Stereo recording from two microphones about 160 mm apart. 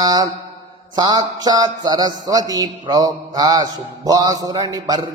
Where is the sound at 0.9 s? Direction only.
25° right (ahead or behind).